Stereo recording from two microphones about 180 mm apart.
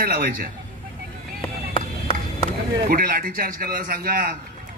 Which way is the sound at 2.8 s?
55° right (ahead or behind).